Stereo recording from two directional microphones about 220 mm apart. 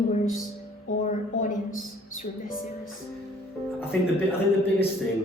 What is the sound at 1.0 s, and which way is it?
A woman's voice, 35° left (ahead or behind).